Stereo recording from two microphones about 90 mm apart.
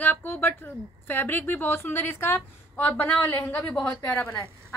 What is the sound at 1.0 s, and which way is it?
A woman's voice, 20° left (ahead or behind).